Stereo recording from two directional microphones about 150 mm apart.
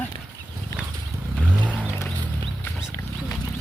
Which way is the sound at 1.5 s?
10° right (ahead or behind).